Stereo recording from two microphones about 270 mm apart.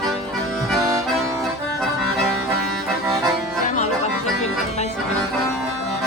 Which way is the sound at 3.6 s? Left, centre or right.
Left.